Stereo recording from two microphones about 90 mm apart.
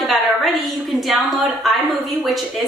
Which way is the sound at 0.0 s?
Centre (ahead or behind).